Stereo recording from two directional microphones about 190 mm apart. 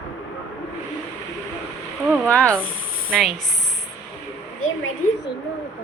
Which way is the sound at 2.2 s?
5° left (ahead or behind).